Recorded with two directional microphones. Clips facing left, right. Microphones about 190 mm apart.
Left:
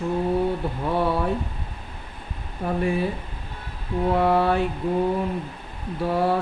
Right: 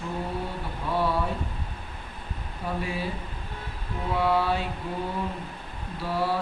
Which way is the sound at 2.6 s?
50° left (ahead or behind).